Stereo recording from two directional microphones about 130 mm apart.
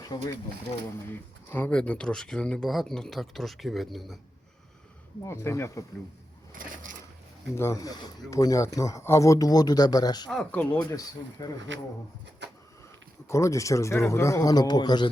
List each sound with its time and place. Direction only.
0.1 s speech: 30° left (ahead or behind)
1.1 s speech: 15° left (ahead or behind)
5.2 s speech: 20° left (ahead or behind)
6.5 s a sound: 90° right
7.5 s speech: 20° left (ahead or behind)
10.2 s speech: 10° left (ahead or behind)
10.9 s speech: 30° left (ahead or behind)
13.2 s speech: 20° left (ahead or behind)